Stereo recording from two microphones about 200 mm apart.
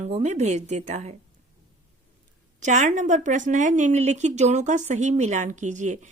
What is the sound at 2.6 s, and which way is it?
A woman's voice, 35° right (ahead or behind).